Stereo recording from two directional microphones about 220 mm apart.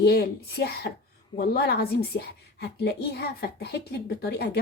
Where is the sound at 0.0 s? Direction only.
50° left (ahead or behind).